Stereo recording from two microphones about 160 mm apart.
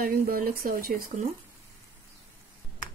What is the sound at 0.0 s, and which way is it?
Speech, 65° right (ahead or behind).